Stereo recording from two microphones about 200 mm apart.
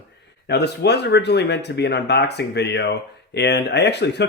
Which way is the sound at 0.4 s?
55° left (ahead or behind).